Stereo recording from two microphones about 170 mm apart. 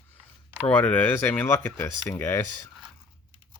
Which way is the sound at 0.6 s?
10° left (ahead or behind).